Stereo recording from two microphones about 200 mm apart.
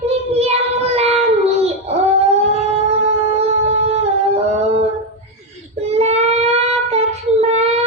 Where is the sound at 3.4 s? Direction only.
30° right (ahead or behind).